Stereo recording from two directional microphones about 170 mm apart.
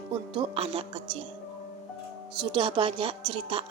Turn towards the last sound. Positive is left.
turn(degrees=-30)  # may be behind; listen again after turning